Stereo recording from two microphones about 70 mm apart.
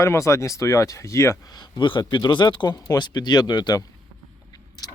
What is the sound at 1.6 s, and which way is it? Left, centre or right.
Speech, left.